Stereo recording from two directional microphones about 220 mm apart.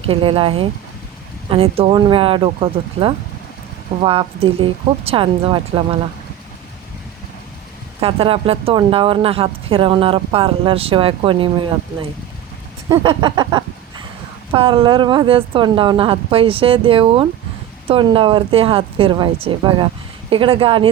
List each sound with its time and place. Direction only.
0.0 s speech: 25° right (ahead or behind)
8.0 s speech: 25° right (ahead or behind)
12.9 s a sound: 20° right (ahead or behind)
14.5 s speech: 25° right (ahead or behind)